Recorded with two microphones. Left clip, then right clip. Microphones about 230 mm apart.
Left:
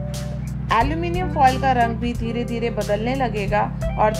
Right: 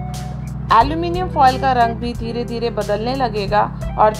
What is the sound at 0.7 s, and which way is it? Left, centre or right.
Speech, centre.